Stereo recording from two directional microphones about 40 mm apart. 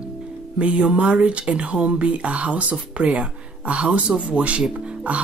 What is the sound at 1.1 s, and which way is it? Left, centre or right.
Speech, right.